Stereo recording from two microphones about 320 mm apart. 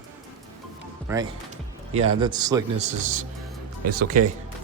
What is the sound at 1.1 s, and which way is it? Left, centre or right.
A man's voice, centre.